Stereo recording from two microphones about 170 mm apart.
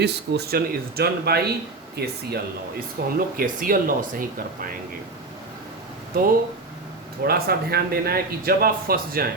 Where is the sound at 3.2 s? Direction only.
55° right (ahead or behind).